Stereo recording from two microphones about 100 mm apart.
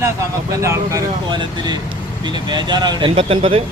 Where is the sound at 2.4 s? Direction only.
45° right (ahead or behind).